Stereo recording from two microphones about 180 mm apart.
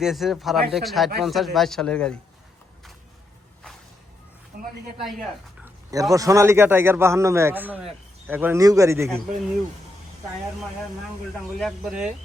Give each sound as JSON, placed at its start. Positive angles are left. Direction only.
{"t": 0.0, "sound": "speech", "side_deg": 0}
{"t": 4.5, "sound": "a woman's voice", "side_deg": -60}
{"t": 5.6, "sound": "speech", "side_deg": -20}
{"t": 11.6, "sound": "speech", "side_deg": -5}